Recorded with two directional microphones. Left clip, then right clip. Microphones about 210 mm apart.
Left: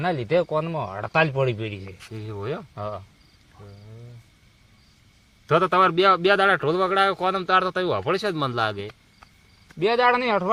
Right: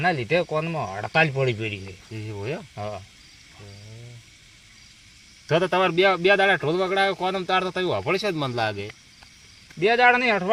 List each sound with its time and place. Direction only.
0.0 s speech: 20° left (ahead or behind)
2.1 s speech: centre (ahead or behind)
2.7 s speech: 25° left (ahead or behind)
5.5 s speech: 15° left (ahead or behind)
10.1 s speech: 25° left (ahead or behind)